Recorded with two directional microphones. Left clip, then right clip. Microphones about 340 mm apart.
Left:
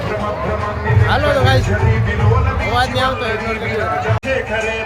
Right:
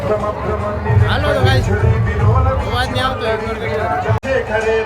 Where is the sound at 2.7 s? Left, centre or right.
Centre.